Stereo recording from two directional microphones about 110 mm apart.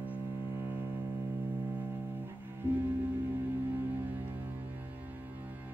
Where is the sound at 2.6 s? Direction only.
20° right (ahead or behind).